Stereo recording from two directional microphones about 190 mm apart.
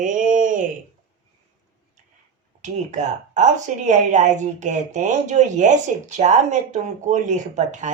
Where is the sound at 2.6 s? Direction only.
40° right (ahead or behind).